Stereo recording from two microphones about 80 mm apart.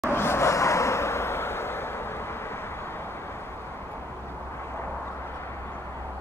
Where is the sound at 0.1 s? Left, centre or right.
Left.